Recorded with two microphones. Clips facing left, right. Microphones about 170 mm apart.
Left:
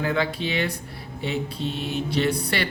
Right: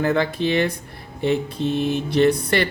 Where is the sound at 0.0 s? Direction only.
45° right (ahead or behind).